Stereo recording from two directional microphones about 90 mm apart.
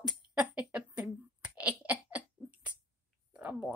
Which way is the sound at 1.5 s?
15° right (ahead or behind).